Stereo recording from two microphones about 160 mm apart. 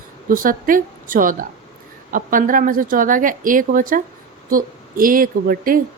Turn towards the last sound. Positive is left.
turn(degrees=-60)  # may be behind; listen again after turning